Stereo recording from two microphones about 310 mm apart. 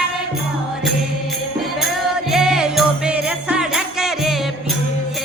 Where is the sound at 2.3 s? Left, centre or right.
Centre.